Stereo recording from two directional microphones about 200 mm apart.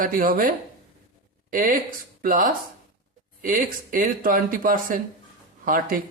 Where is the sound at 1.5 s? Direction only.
45° right (ahead or behind).